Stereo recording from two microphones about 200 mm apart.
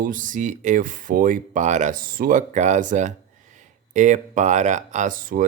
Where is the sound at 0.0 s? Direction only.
40° right (ahead or behind).